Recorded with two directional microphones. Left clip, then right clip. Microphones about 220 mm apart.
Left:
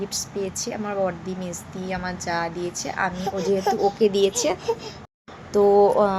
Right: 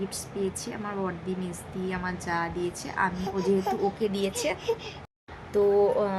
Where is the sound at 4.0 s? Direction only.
20° left (ahead or behind).